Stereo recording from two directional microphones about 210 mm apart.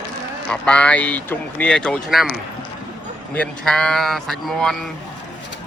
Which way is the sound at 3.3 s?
5° left (ahead or behind).